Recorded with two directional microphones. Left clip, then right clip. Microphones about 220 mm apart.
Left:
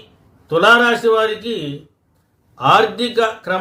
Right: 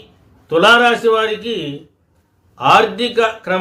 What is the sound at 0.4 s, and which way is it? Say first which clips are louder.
A man's voice: right 1 dB; 5° left (ahead or behind).